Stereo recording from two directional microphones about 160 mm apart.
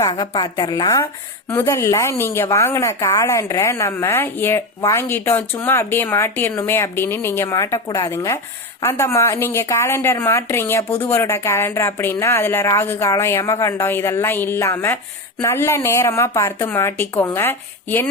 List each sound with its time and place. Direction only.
0.0 s a woman's voice: 30° left (ahead or behind)